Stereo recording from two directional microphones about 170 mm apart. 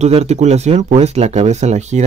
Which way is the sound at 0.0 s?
40° right (ahead or behind).